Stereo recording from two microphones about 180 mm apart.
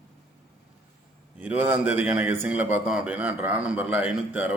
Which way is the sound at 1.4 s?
10° right (ahead or behind).